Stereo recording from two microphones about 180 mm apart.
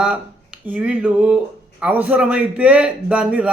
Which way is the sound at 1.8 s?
10° right (ahead or behind).